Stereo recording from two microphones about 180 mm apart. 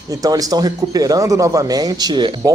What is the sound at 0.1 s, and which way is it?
Speech, 20° right (ahead or behind).